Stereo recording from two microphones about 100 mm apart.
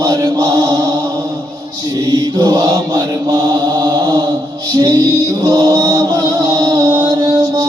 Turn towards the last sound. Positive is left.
turn(degrees=-40)  # may be behind; listen again after turning